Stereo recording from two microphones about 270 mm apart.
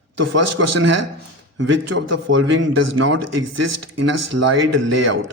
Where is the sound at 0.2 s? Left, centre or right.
Right.